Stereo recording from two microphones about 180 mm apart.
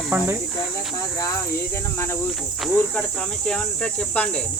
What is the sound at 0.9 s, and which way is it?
Speech, 20° left (ahead or behind).